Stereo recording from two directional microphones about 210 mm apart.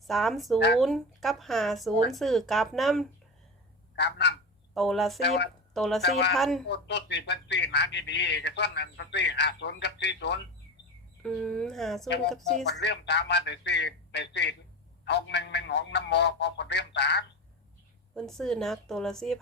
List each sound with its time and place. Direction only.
0.1 s speech: centre (ahead or behind)
3.9 s speech: 55° left (ahead or behind)
4.7 s speech: centre (ahead or behind)
6.0 s speech: 55° left (ahead or behind)
6.3 s speech: centre (ahead or behind)
6.7 s speech: 55° left (ahead or behind)
11.2 s speech: centre (ahead or behind)
12.6 s speech: 55° left (ahead or behind)
18.1 s speech: centre (ahead or behind)